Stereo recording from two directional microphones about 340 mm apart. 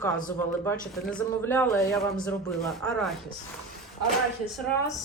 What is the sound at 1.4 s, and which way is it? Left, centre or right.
Speech, centre.